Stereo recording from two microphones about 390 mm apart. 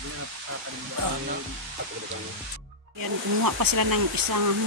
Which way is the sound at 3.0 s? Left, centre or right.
Right.